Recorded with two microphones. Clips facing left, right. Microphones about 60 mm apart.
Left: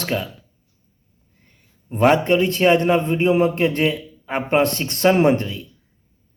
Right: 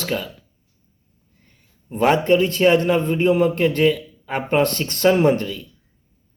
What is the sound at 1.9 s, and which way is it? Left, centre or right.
A man's voice, left.